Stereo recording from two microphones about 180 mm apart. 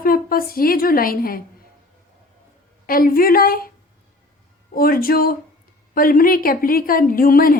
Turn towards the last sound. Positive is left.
turn(degrees=55)  # may be behind; listen again after turning